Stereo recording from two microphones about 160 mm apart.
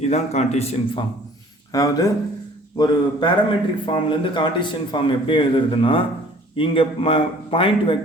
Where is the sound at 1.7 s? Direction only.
20° left (ahead or behind).